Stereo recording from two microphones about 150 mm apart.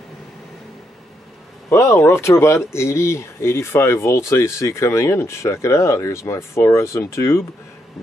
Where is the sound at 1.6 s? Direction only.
15° left (ahead or behind).